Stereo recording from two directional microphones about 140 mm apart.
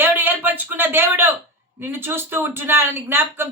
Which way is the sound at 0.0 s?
15° right (ahead or behind).